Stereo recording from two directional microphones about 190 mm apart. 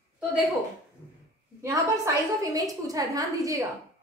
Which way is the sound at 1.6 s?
15° right (ahead or behind).